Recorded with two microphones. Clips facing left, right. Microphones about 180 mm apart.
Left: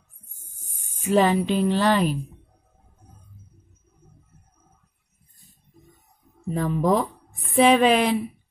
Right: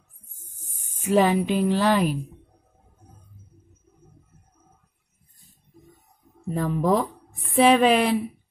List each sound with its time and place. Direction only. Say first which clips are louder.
1.0 s a woman's voice: even; 10° right (ahead or behind)
6.4 s speech: left 1 dB; 5° right (ahead or behind)